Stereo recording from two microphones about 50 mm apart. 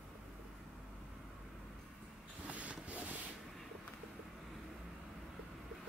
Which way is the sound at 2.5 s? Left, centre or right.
Right.